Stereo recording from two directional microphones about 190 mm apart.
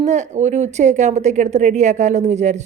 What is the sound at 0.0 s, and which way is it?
A woman's voice, 40° right (ahead or behind).